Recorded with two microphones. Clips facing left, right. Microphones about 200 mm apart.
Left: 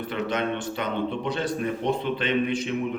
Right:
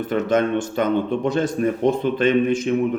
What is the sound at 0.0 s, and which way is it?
A man's voice, 45° right (ahead or behind).